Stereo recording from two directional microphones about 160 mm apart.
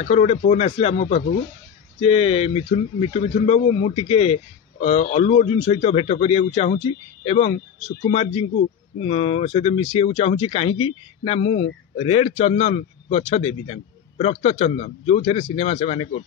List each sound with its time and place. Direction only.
0.0 s speech: 45° left (ahead or behind)